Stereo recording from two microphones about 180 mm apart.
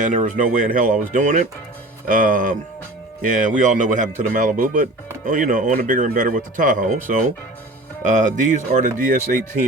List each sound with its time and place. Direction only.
0.3 s speech: 45° right (ahead or behind)